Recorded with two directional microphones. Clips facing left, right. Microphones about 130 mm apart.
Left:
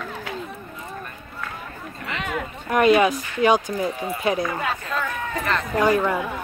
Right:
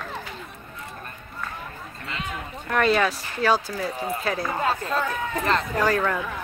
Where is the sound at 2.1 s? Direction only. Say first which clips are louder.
Left 5 dB; 85° left.